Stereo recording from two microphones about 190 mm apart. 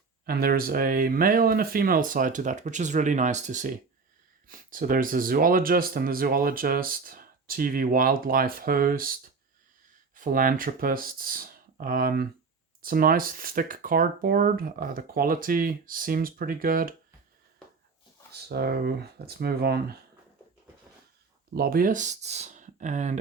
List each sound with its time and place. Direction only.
0.3 s speech: 50° right (ahead or behind)
10.2 s speech: 45° right (ahead or behind)
18.3 s speech: 55° right (ahead or behind)
21.5 s speech: 50° right (ahead or behind)